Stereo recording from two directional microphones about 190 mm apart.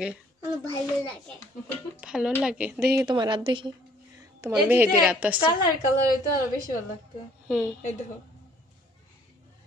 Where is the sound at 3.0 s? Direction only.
20° right (ahead or behind); by 5.4 s 5° right (ahead or behind).